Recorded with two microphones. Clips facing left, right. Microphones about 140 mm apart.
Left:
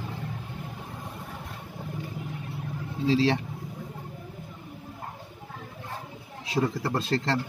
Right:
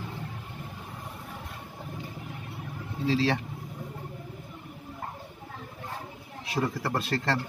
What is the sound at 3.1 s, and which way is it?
Speech, 30° left (ahead or behind).